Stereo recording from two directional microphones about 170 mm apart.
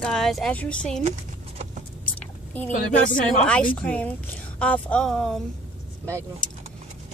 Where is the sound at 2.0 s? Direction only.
10° left (ahead or behind).